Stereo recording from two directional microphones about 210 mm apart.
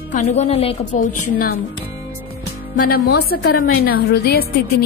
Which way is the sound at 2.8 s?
45° left (ahead or behind).